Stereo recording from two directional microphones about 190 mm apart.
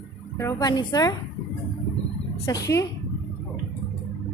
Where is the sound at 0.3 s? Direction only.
20° left (ahead or behind).